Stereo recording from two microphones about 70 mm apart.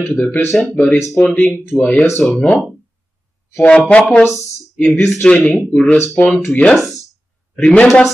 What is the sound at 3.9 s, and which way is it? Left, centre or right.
Speech, centre.